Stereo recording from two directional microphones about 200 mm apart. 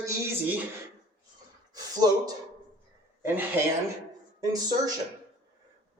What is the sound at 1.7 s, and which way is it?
Speech, 20° right (ahead or behind).